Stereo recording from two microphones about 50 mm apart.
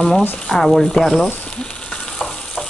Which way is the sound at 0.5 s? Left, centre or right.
Centre.